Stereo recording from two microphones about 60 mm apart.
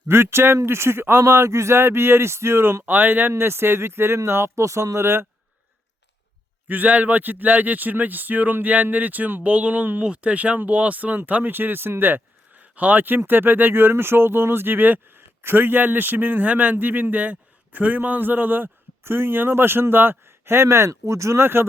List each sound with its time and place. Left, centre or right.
0.1 s speech: right
2.8 s speech: right
6.7 s a man's voice: right
21.4 s speech: right